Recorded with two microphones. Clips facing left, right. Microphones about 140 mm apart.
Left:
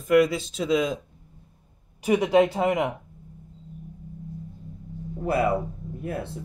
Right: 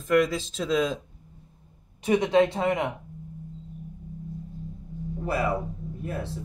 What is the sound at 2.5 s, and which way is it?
Speech, 20° left (ahead or behind).